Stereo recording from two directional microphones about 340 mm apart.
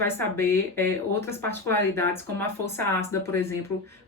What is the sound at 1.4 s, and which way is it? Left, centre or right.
Speech, right.